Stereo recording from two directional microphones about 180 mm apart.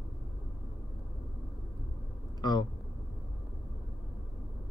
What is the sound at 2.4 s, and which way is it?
Speech, 25° left (ahead or behind).